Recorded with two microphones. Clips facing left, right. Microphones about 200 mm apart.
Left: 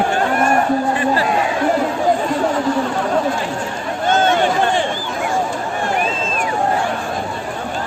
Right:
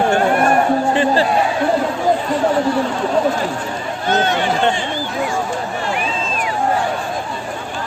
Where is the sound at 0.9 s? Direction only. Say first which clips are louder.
Right 3 dB; 30° right (ahead or behind).